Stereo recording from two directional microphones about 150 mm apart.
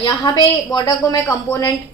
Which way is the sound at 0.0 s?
30° left (ahead or behind).